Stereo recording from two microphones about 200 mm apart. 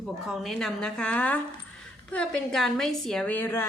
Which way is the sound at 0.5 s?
5° left (ahead or behind).